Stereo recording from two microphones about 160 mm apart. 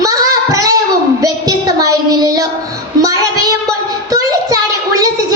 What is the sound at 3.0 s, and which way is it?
Child singing, 20° right (ahead or behind).